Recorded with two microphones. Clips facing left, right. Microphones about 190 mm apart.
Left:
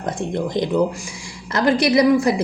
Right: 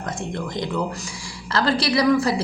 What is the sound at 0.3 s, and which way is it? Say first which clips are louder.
A woman's voice: left 8 dB; 20° left (ahead or behind).